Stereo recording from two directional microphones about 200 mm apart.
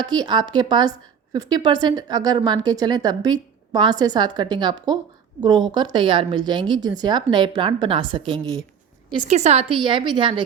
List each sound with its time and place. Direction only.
0.0 s a woman's voice: 20° right (ahead or behind)